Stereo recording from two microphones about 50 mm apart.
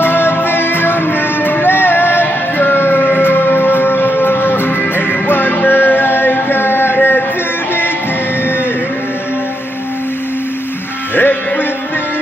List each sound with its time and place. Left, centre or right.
0.0 s music: left
11.1 s music: left